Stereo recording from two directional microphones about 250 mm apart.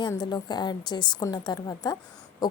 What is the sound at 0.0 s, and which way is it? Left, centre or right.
A woman's voice, centre.